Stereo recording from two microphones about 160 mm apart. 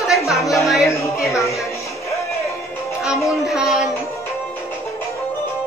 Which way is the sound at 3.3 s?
Centre (ahead or behind).